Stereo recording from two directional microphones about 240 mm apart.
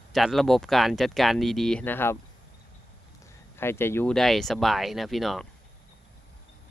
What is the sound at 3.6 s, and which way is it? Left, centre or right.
Speech, centre.